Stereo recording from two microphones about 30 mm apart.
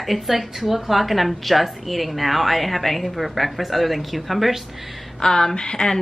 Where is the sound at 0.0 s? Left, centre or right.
Centre.